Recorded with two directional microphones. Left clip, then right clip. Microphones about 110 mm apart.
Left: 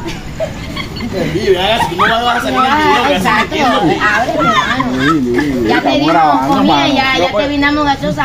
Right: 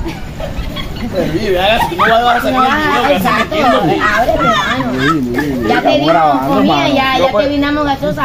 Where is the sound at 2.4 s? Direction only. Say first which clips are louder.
Left 1 dB; 15° right (ahead or behind).